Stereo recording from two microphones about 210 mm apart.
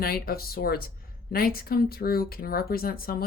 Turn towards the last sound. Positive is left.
turn(degrees=45)  # may be behind; listen again after turning